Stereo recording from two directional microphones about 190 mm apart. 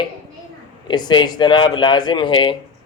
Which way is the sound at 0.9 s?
25° left (ahead or behind).